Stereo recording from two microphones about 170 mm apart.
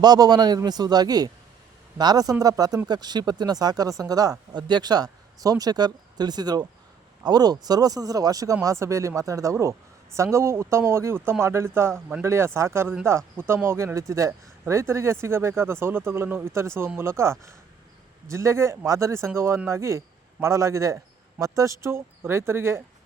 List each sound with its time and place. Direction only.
0.0 s speech: 25° right (ahead or behind)